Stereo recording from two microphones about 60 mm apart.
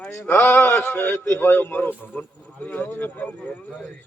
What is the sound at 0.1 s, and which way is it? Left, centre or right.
A man's voice, left.